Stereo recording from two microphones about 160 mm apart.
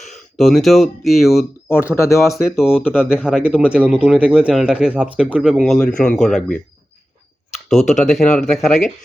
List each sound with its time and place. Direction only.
0.1 s speech: centre (ahead or behind)
2.0 s speech: 20° left (ahead or behind)
2.3 s speech: 5° right (ahead or behind)
2.9 s speech: 10° left (ahead or behind)
3.2 s speech: 5° right (ahead or behind)
8.0 s speech: 5° left (ahead or behind)